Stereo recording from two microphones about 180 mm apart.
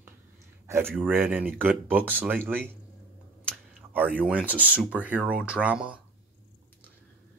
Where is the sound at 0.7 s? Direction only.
10° right (ahead or behind).